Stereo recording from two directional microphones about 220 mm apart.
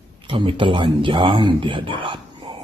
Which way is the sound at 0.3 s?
25° right (ahead or behind).